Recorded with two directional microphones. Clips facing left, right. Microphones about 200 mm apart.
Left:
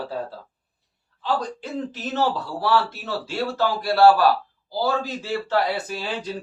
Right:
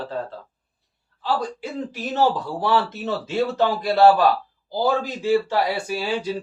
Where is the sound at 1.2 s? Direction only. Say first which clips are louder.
Right 1 dB; 10° right (ahead or behind).